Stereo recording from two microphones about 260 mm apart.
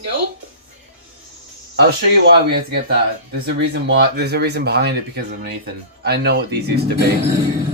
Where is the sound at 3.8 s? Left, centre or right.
Right.